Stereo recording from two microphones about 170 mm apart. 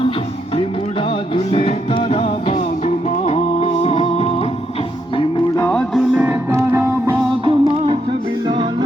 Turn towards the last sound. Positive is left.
turn(degrees=-35)  # may be behind; listen again after turning